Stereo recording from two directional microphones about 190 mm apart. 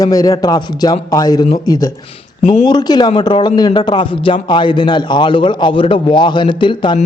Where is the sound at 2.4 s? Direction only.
30° left (ahead or behind).